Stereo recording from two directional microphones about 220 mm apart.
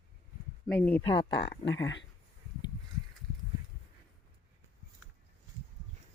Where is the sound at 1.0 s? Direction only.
20° left (ahead or behind).